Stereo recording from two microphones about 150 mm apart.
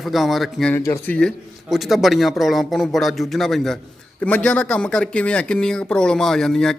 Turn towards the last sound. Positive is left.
turn(degrees=5)  # may be behind; listen again after turning